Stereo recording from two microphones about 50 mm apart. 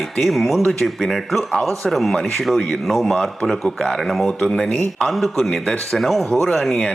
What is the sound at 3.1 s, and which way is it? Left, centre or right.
Speech, centre.